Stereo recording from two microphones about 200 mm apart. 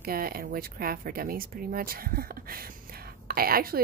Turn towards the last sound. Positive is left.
turn(degrees=-50)  # may be behind; listen again after turning